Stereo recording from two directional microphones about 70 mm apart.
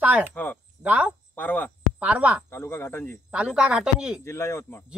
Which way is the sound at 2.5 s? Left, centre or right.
Left.